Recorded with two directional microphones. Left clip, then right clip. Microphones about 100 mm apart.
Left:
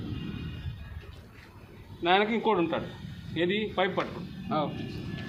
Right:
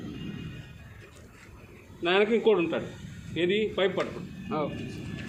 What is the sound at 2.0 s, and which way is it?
Speech, 55° left (ahead or behind).